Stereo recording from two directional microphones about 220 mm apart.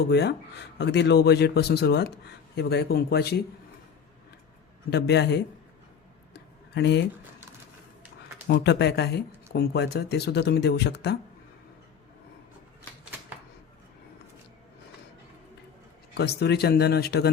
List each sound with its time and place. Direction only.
0.1 s speech: 50° left (ahead or behind)
4.9 s speech: 50° left (ahead or behind)
6.3 s tick: 50° left (ahead or behind)
8.4 s speech: 50° left (ahead or behind)
16.1 s speech: 50° left (ahead or behind)